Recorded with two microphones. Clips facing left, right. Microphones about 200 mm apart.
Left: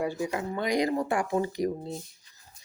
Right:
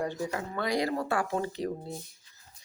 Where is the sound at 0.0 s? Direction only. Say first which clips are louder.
Left 3 dB; 10° left (ahead or behind).